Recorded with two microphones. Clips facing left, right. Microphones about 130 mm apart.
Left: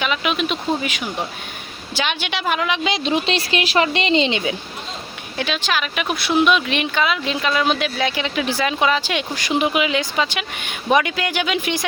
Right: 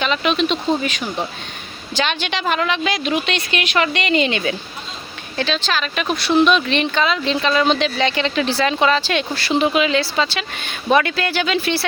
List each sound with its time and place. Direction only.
0.0 s speech: 10° left (ahead or behind)